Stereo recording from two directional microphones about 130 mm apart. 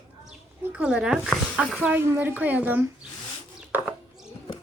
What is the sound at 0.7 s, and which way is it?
Speech, 5° right (ahead or behind).